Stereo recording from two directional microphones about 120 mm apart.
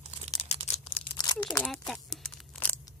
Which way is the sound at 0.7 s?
65° left (ahead or behind).